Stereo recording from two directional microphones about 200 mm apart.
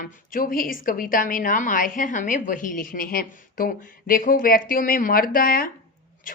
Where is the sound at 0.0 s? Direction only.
45° left (ahead or behind).